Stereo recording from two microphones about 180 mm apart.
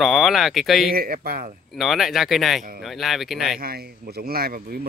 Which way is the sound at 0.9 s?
55° right (ahead or behind).